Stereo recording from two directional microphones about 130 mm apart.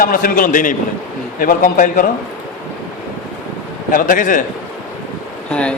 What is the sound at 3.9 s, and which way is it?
Speech, 90° left.